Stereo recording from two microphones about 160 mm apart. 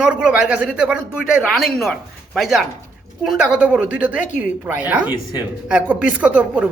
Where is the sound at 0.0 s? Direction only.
5° right (ahead or behind).